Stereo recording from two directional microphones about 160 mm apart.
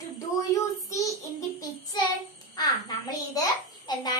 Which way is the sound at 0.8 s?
20° left (ahead or behind).